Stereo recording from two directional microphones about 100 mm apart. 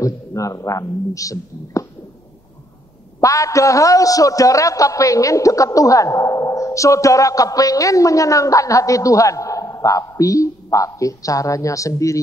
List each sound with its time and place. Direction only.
0.0 s speech: 35° left (ahead or behind)
3.2 s a man's voice: 35° left (ahead or behind)